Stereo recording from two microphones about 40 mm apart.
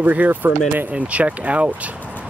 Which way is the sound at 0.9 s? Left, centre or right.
Right.